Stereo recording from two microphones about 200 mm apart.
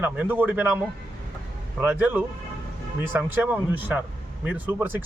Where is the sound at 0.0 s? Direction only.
10° right (ahead or behind).